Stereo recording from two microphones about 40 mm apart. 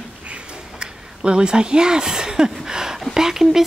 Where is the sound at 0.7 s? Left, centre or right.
Right.